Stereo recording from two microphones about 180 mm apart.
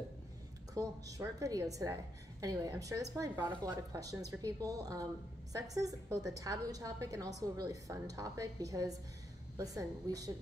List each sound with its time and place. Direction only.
0.7 s a woman's voice: 20° right (ahead or behind)